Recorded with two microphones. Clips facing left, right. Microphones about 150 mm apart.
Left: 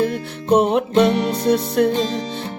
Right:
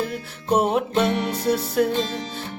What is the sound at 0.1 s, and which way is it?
Music, 5° right (ahead or behind).